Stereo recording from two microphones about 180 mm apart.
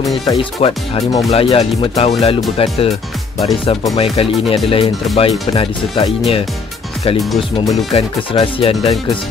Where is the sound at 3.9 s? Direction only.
35° left (ahead or behind).